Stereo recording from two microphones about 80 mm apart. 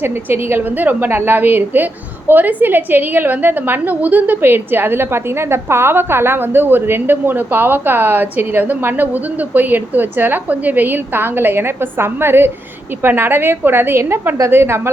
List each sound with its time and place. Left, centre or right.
0.0 s a woman's voice: right